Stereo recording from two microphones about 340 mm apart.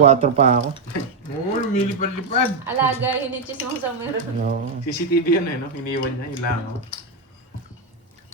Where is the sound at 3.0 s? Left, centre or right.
Centre.